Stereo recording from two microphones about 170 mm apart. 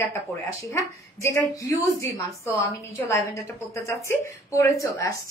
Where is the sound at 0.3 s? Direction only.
15° left (ahead or behind).